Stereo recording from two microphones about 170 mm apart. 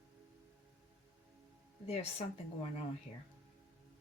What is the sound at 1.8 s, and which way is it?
Speech, 35° left (ahead or behind).